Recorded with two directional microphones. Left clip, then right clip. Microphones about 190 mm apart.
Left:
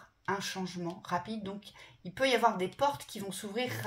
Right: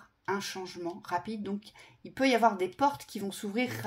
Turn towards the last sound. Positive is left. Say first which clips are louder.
# right 2 dB
turn(degrees=-45)  # may be behind; listen again after turning